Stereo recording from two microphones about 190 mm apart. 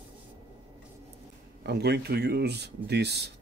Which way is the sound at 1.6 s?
60° right (ahead or behind).